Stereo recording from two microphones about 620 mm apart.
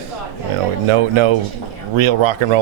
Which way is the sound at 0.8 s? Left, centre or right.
Right.